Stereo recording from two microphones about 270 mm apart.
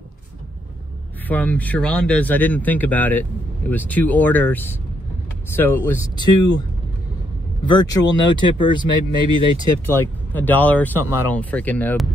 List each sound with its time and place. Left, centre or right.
1.3 s speech: centre
7.6 s speech: centre
9.5 s speech: left
9.8 s speech: centre
11.0 s speech: left
11.2 s speech: centre